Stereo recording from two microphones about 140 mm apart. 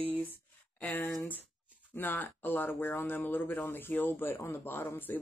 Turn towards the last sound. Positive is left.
turn(degrees=15)  # may be behind; listen again after turning